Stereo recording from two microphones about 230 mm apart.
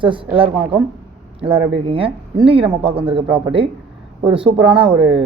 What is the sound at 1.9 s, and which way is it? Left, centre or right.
Speech, right.